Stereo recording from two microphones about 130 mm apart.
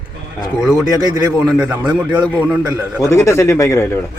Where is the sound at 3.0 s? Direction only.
20° left (ahead or behind).